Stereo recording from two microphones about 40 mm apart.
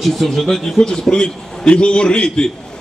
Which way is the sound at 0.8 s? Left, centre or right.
Centre.